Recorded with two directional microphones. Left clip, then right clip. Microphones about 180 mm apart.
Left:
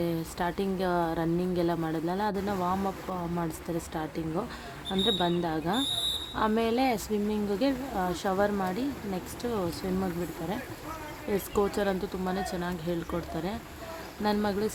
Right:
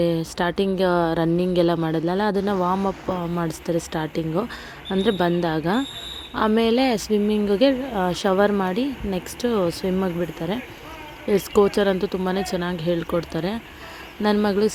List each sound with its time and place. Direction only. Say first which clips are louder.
0.0 s a woman's voice: right 9 dB; 35° right (ahead or behind)